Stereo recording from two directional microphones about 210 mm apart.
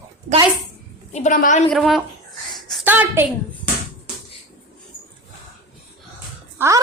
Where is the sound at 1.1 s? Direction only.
35° left (ahead or behind).